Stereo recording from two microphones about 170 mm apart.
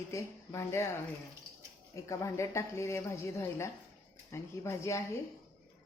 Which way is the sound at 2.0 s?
15° left (ahead or behind).